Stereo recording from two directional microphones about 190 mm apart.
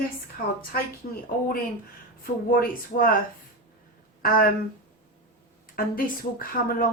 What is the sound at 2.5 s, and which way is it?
Speech, 50° left (ahead or behind).